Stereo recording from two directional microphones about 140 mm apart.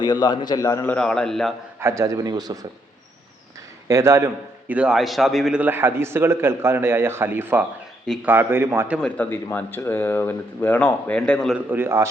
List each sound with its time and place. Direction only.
0.0 s a man's voice: 30° left (ahead or behind)
0.9 s a man's voice: 5° left (ahead or behind)
1.8 s a man's voice: 20° right (ahead or behind)
3.8 s a man's voice: 20° right (ahead or behind)
4.7 s a man's voice: 5° right (ahead or behind)
9.0 s speech: 10° left (ahead or behind)
11.7 s a man's voice: 15° right (ahead or behind)